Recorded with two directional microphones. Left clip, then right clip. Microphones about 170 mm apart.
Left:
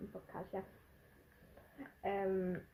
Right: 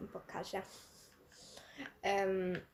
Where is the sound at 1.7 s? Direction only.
20° right (ahead or behind).